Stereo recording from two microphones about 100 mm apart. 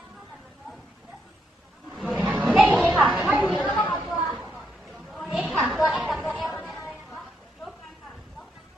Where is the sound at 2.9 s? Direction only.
5° right (ahead or behind).